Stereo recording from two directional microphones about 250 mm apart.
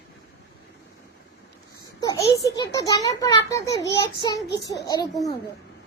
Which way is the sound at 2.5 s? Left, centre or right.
Centre.